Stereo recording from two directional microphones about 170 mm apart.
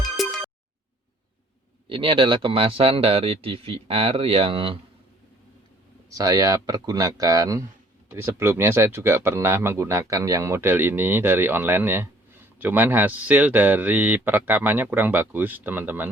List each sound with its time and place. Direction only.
0.0 s music: centre (ahead or behind)
1.9 s speech: 30° right (ahead or behind)
6.1 s speech: 20° right (ahead or behind)